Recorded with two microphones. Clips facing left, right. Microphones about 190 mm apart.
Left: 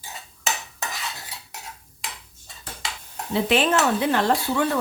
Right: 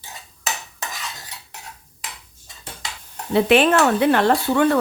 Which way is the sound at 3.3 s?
65° right (ahead or behind).